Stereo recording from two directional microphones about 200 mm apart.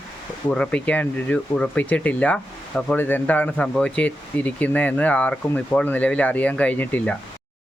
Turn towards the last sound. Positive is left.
turn(degrees=5)  # may be behind; listen again after turning